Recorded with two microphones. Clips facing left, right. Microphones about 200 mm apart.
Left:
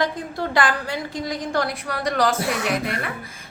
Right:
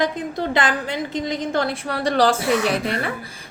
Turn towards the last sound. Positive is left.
turn(degrees=-30)  # may be behind; listen again after turning